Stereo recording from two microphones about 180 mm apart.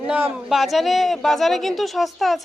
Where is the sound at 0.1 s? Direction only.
5° right (ahead or behind).